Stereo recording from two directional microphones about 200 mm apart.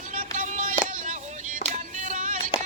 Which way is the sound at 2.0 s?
40° right (ahead or behind).